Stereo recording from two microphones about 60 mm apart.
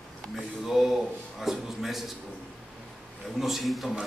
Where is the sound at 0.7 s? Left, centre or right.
Centre.